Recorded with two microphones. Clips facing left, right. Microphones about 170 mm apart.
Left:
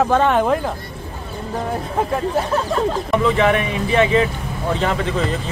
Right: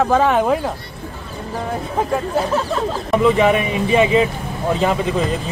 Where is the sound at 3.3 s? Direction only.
15° right (ahead or behind).